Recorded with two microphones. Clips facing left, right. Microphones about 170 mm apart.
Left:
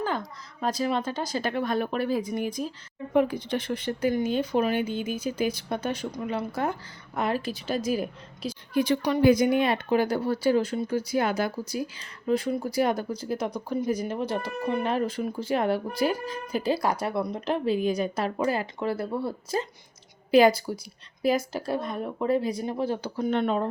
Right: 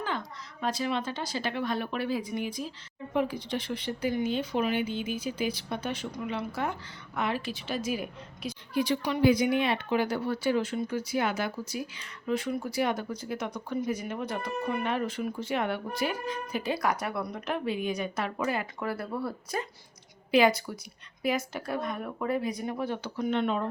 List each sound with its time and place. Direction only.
0.6 s speech: 40° left (ahead or behind)
8.7 s speech: 50° left (ahead or behind)